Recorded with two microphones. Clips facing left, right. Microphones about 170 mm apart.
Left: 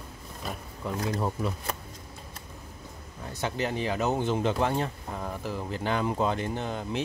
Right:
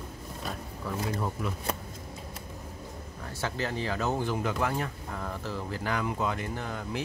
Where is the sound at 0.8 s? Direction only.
20° left (ahead or behind).